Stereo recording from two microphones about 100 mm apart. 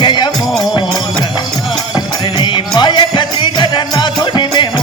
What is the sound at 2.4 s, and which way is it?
Music, 55° left (ahead or behind).